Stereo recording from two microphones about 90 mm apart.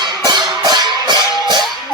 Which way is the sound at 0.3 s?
50° right (ahead or behind).